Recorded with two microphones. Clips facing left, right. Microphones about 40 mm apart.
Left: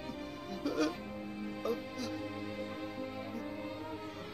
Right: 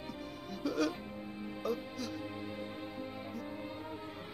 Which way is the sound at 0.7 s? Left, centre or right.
Centre.